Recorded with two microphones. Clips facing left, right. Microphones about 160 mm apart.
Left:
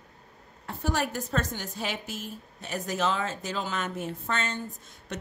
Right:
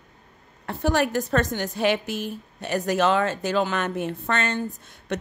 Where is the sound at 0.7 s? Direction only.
70° right (ahead or behind).